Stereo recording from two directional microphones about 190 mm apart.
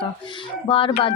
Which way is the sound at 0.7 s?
25° left (ahead or behind).